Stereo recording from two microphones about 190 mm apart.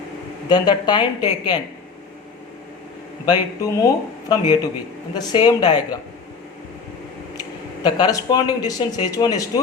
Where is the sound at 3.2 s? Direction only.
20° left (ahead or behind).